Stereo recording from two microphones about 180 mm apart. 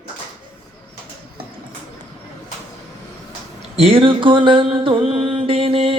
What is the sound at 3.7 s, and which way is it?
Music, 30° right (ahead or behind).